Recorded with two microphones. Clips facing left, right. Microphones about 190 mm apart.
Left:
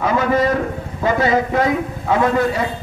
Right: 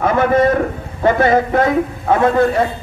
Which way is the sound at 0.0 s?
55° right (ahead or behind).